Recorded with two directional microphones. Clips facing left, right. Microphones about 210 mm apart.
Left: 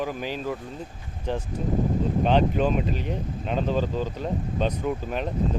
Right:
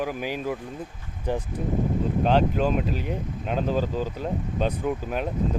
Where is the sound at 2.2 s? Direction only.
5° right (ahead or behind).